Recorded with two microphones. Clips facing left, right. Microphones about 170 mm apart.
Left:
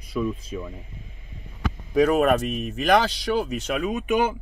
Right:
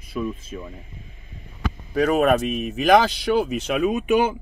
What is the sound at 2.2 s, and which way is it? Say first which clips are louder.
Speech: right 2 dB; 5° right (ahead or behind).